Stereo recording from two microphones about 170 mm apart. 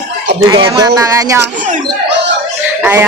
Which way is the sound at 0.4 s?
30° right (ahead or behind).